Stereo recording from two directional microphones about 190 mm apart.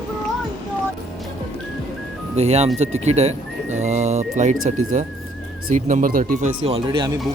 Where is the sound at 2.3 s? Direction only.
35° right (ahead or behind).